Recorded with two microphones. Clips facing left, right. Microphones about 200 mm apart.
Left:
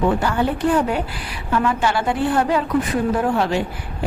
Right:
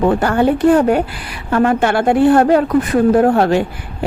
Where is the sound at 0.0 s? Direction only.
55° right (ahead or behind).